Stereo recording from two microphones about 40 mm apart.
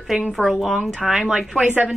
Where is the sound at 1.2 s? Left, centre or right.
Right.